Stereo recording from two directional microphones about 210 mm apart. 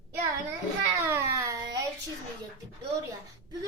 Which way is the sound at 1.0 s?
10° right (ahead or behind).